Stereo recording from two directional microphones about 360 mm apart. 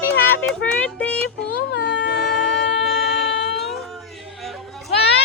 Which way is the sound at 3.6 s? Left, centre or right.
Centre.